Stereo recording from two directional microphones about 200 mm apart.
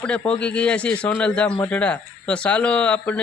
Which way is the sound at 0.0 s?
5° left (ahead or behind).